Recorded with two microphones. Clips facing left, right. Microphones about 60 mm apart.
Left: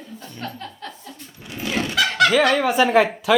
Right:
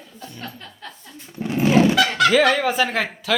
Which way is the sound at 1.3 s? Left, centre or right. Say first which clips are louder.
Right 9 dB; right.